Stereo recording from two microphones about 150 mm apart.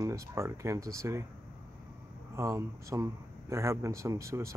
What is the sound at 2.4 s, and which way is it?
Speech, 20° right (ahead or behind).